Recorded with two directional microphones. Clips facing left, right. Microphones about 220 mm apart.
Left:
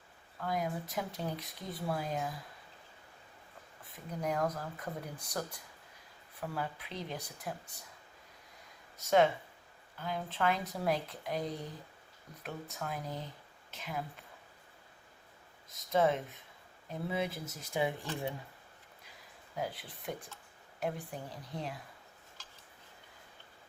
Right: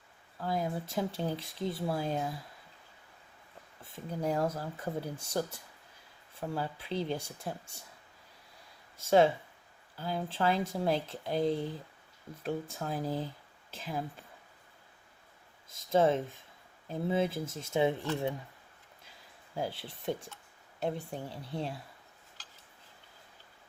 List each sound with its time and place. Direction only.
0.3 s speech: 30° right (ahead or behind)
3.8 s speech: 30° right (ahead or behind)
9.0 s speech: 30° right (ahead or behind)
15.7 s speech: 30° right (ahead or behind)
19.5 s speech: 30° right (ahead or behind)